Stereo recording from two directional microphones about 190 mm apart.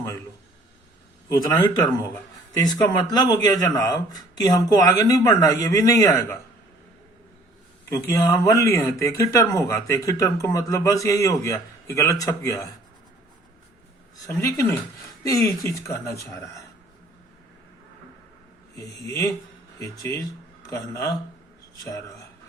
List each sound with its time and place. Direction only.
1.3 s speech: 20° left (ahead or behind)
7.9 s speech: 15° left (ahead or behind)
14.3 s speech: 15° left (ahead or behind)
18.8 s speech: 15° left (ahead or behind)